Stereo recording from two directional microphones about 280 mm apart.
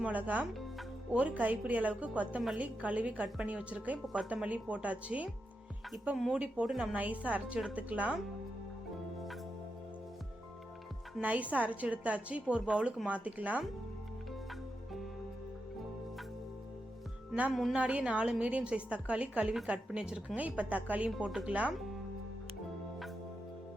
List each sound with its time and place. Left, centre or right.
0.0 s a woman's voice: centre
11.2 s a woman's voice: centre
17.3 s a woman's voice: centre